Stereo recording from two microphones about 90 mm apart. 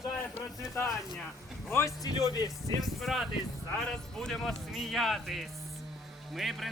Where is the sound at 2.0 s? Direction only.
45° left (ahead or behind).